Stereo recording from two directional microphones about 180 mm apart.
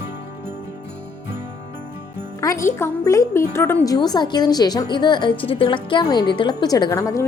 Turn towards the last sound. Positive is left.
turn(degrees=20)  # may be behind; listen again after turning